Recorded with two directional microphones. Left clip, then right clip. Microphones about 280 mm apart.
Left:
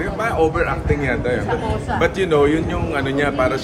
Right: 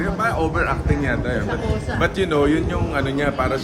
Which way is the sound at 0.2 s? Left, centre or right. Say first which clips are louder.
Left 4 dB; centre.